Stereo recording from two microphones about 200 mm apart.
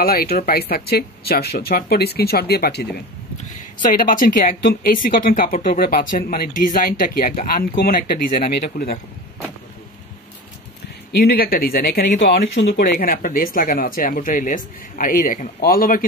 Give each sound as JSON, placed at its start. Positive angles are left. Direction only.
{"t": 0.0, "sound": "speech", "side_deg": 50}
{"t": 3.4, "sound": "speech", "side_deg": 40}
{"t": 11.1, "sound": "speech", "side_deg": 50}